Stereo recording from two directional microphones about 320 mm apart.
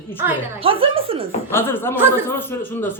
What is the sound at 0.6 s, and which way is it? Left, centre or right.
Speech, centre.